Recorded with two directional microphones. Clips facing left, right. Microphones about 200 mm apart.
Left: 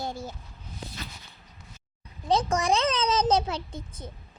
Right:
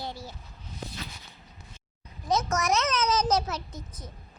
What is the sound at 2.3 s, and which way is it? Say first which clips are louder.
A child's voice: left 2 dB; 30° left (ahead or behind).